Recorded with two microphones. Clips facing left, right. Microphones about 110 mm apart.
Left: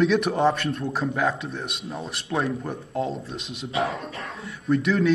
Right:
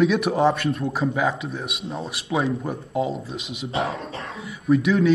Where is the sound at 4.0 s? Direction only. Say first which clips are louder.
Right 2 dB; 30° right (ahead or behind).